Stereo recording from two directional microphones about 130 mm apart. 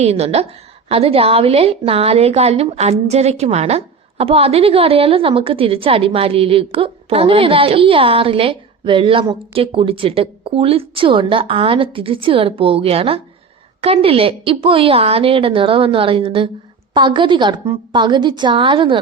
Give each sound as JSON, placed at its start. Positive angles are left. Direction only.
{"t": 0.0, "sound": "a woman's voice", "side_deg": -55}